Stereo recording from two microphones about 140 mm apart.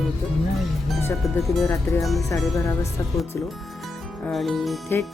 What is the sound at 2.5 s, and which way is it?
Speech, 20° left (ahead or behind).